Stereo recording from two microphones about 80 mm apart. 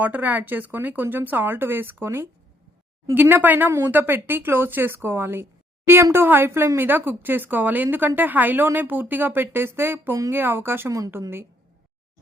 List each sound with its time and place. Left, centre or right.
0.0 s a woman's voice: right